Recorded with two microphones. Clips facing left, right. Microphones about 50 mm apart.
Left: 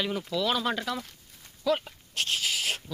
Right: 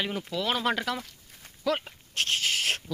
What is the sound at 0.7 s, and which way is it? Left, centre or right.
Speech, right.